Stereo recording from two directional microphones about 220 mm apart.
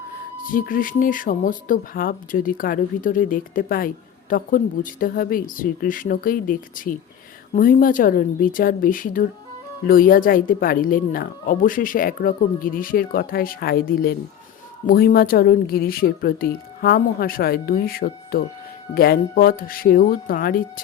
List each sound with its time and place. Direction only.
0.4 s speech: 40° left (ahead or behind)